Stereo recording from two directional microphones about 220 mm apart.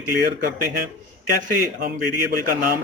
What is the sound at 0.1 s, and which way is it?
Speech, 40° right (ahead or behind).